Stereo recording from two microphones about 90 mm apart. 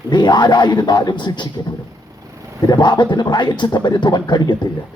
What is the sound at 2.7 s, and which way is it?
A man's voice, 55° left (ahead or behind).